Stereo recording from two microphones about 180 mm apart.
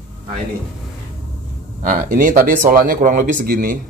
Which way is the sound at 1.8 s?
50° right (ahead or behind).